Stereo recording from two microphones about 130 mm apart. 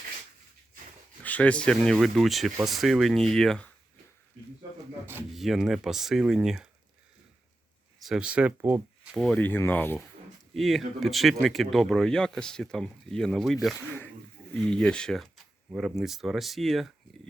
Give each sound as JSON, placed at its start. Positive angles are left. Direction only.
{"t": 1.2, "sound": "speech", "side_deg": 10}
{"t": 5.3, "sound": "speech", "side_deg": 0}
{"t": 7.9, "sound": "speech", "side_deg": -5}
{"t": 9.1, "sound": "speech", "side_deg": 0}
{"t": 9.4, "sound": "speech", "side_deg": 15}
{"t": 10.5, "sound": "speech", "side_deg": 0}